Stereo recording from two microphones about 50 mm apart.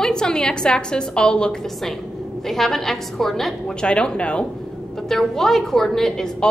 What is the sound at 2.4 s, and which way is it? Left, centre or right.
A woman's voice, centre.